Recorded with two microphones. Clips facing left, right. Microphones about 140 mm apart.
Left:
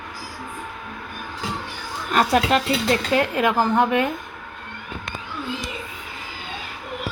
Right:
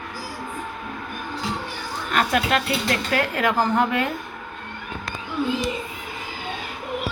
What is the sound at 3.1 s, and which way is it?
Speech, 20° left (ahead or behind).